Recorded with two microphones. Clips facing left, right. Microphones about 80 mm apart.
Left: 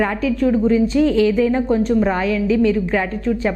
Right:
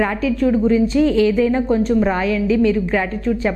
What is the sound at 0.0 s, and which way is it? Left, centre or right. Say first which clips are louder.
A woman's voice: even; centre.